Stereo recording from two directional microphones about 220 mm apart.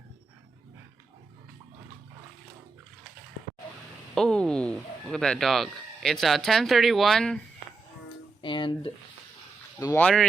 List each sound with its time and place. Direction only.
4.1 s speech: centre (ahead or behind)
8.4 s a sound: 20° left (ahead or behind)
9.8 s speech: 10° left (ahead or behind)